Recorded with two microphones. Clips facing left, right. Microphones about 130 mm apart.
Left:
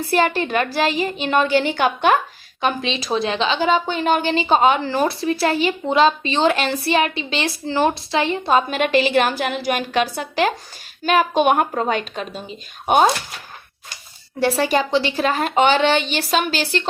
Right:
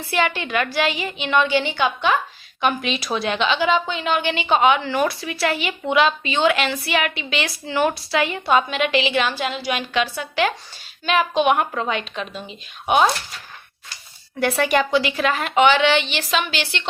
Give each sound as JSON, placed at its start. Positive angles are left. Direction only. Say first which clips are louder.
{"t": 0.1, "sound": "a woman's voice", "louder": "left 3 dB", "side_deg": 40}
{"t": 2.6, "sound": "a woman's voice", "louder": "even", "side_deg": 35}
{"t": 14.3, "sound": "a woman's voice", "louder": "left 1 dB", "side_deg": 35}